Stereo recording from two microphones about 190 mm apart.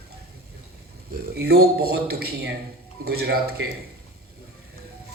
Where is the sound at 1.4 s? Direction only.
55° right (ahead or behind).